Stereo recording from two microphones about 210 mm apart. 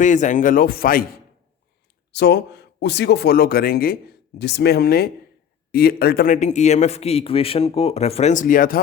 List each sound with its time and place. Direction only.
0.0 s a man's voice: 35° left (ahead or behind)
2.1 s a man's voice: 50° left (ahead or behind)